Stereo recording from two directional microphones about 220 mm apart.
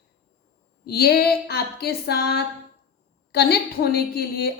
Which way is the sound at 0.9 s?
45° left (ahead or behind).